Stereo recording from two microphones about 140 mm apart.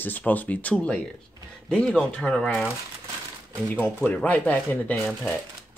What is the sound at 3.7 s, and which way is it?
Speech, 10° left (ahead or behind).